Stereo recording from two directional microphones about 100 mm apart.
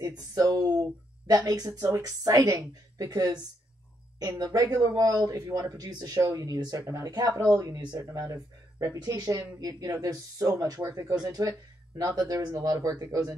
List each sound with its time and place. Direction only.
0.0 s speech: 40° right (ahead or behind)
4.4 s speech: 40° right (ahead or behind)